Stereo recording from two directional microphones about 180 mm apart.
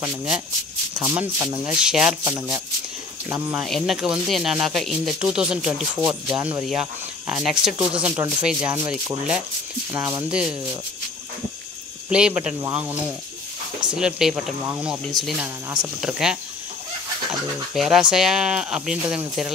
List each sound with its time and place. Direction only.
0.0 s speech: 5° right (ahead or behind)
3.3 s speech: 10° right (ahead or behind)
3.6 s speech: centre (ahead or behind)
8.8 s speech: 20° right (ahead or behind)
12.1 s speech: 5° right (ahead or behind)
17.7 s speech: centre (ahead or behind)